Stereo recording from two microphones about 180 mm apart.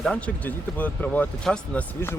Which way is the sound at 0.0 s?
5° left (ahead or behind).